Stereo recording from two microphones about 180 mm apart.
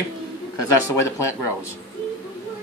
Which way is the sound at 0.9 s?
15° left (ahead or behind).